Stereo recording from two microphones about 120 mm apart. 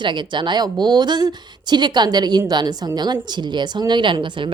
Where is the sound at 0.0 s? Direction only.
40° right (ahead or behind).